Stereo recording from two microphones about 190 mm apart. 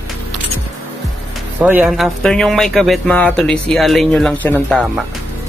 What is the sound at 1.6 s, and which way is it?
Speech, 10° right (ahead or behind).